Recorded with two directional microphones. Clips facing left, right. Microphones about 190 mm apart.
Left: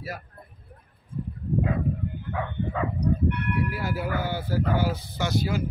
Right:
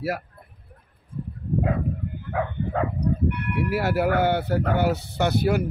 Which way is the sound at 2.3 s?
55° right (ahead or behind).